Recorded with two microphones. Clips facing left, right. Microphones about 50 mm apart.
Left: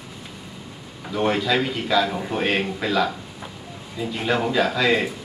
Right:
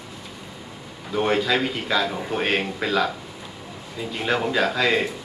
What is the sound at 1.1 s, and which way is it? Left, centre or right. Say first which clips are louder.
Speech: even; centre.